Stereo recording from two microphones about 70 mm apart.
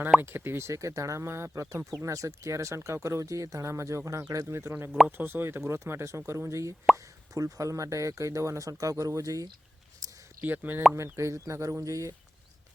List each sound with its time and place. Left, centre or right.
0.2 s speech: right
0.7 s speech: right
10.0 s a sound: right
10.4 s speech: right
10.9 s speech: right